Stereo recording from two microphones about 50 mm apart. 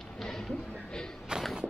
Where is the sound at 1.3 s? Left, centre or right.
Centre.